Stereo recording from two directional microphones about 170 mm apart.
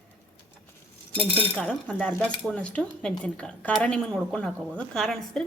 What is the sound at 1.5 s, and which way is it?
Speech, 5° left (ahead or behind).